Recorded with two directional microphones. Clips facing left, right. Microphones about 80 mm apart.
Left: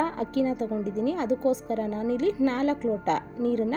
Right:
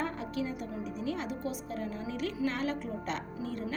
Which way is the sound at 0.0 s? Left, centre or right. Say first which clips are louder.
Left 9 dB; left.